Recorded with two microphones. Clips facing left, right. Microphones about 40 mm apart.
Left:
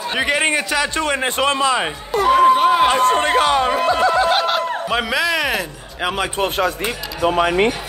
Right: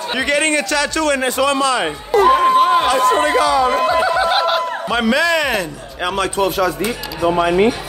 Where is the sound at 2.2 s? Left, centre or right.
Centre.